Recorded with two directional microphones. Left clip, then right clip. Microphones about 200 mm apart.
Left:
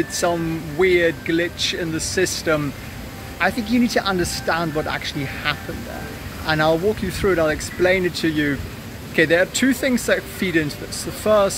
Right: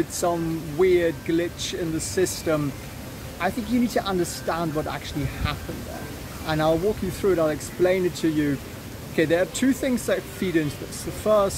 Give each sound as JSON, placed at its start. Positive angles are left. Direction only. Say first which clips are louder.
{"t": 0.2, "sound": "speech", "louder": "left 4 dB", "side_deg": -5}